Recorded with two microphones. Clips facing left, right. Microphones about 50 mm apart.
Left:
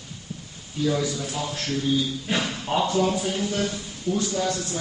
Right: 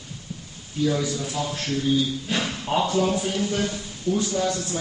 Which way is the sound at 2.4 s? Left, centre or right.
Centre.